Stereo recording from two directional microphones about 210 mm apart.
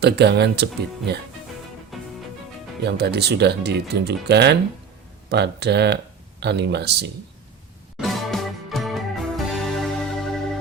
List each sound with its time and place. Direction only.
0.0 s speech: 50° right (ahead or behind)
1.9 s music: centre (ahead or behind)
2.8 s speech: 50° right (ahead or behind)
7.9 s music: centre (ahead or behind)